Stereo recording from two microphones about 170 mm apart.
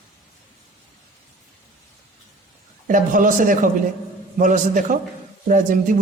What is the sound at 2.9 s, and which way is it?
Speech, 50° right (ahead or behind).